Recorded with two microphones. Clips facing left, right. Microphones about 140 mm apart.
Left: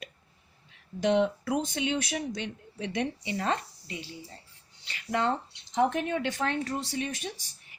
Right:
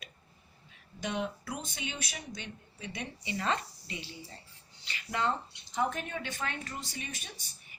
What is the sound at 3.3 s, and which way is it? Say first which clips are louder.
Speech: left 1 dB; 50° left (ahead or behind).